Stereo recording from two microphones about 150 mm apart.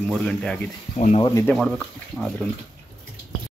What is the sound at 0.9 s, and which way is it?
Speech, 50° left (ahead or behind).